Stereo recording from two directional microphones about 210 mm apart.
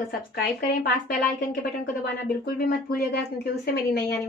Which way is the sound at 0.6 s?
45° left (ahead or behind).